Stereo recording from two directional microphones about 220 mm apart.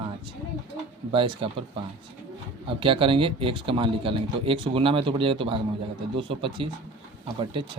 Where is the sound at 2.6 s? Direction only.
25° right (ahead or behind).